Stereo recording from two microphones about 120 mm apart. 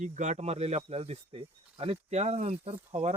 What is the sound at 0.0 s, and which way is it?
Speech, 80° right.